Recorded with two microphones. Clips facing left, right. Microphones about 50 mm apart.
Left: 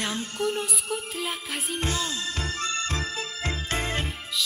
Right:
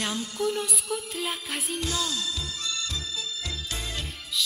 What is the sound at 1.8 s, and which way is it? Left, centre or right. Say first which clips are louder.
Music: left 2 dB; left.